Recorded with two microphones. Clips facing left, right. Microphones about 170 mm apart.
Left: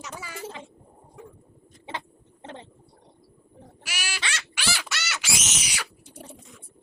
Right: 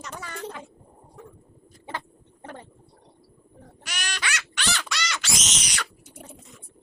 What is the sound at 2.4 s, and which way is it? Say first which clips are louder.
Gargling: even; 25° left (ahead or behind).